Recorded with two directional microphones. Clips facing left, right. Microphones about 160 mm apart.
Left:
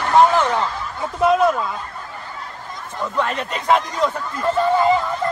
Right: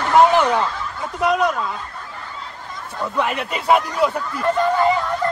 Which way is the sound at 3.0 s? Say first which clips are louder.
Even; 10° right (ahead or behind).